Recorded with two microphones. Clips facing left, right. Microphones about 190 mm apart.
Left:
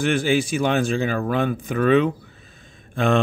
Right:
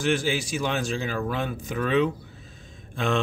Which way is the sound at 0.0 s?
55° left (ahead or behind).